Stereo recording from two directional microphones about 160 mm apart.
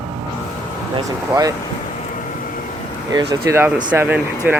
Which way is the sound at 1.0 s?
25° right (ahead or behind).